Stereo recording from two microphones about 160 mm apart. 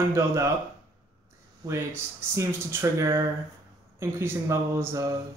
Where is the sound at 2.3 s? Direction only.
15° right (ahead or behind).